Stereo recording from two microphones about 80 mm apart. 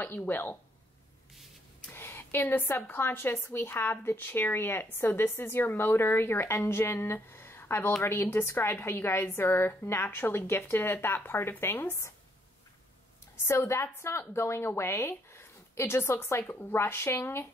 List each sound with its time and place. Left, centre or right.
0.0 s speech: left
1.9 s a woman's voice: left
13.5 s a woman's voice: left